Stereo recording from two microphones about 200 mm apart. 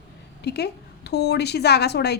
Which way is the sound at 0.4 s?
55° left (ahead or behind).